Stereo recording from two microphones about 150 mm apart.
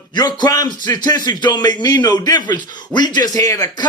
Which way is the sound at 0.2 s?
30° left (ahead or behind).